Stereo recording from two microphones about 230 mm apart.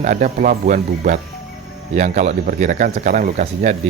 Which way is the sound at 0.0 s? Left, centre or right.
Right.